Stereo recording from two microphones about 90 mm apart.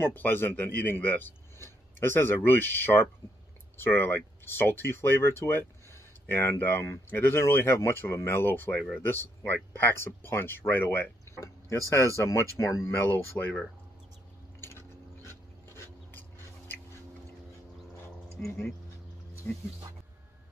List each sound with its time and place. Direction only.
0.0 s speech: 20° left (ahead or behind)
11.3 s a sound: 35° left (ahead or behind)
11.9 s speech: 35° left (ahead or behind)
13.1 s speech: 20° left (ahead or behind)
14.6 s a sound: 30° left (ahead or behind)
19.4 s speech: 20° left (ahead or behind)